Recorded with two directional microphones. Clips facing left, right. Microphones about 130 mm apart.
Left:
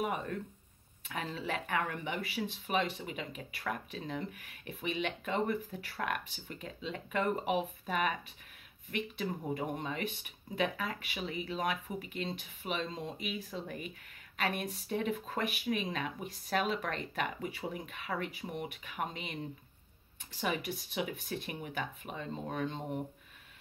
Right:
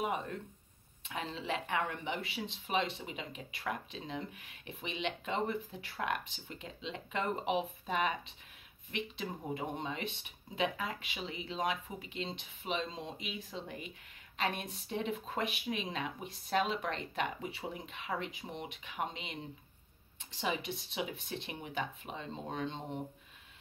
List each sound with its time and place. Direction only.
1.0 s speech: 25° right (ahead or behind)